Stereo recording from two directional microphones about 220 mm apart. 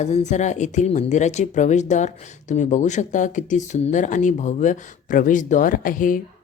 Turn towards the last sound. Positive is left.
turn(degrees=40)  # may be behind; listen again after turning